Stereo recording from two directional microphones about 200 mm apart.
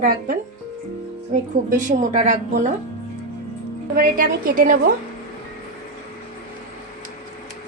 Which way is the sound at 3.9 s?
45° right (ahead or behind).